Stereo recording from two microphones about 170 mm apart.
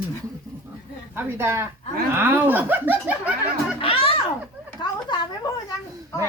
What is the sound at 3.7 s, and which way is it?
Children playing, 35° left (ahead or behind).